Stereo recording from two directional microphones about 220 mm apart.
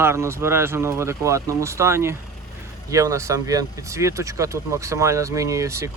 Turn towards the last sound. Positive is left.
turn(degrees=-15)  # may be behind; listen again after turning